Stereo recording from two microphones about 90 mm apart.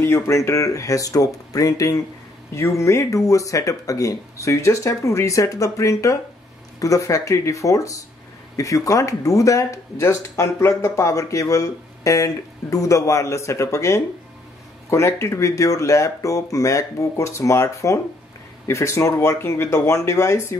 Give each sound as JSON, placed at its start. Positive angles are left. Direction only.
{"t": 0.0, "sound": "speech", "side_deg": 30}